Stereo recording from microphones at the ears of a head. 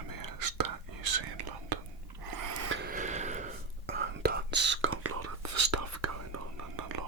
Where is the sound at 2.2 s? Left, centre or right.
Right.